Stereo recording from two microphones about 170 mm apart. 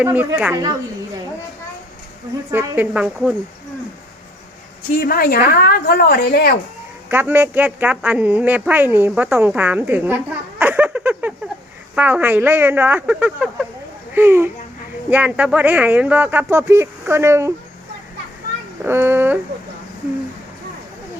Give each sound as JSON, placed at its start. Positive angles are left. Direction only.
{"t": 0.0, "sound": "speech", "side_deg": -10}
{"t": 2.5, "sound": "speech", "side_deg": -10}
{"t": 4.9, "sound": "a woman's voice", "side_deg": 60}
{"t": 7.1, "sound": "speech", "side_deg": -10}
{"t": 18.8, "sound": "speech", "side_deg": -15}